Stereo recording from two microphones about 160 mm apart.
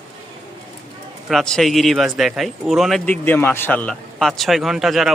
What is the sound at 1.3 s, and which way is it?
Speech, centre (ahead or behind).